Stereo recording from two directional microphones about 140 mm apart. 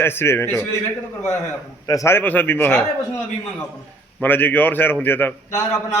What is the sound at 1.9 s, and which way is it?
Speech, 20° left (ahead or behind).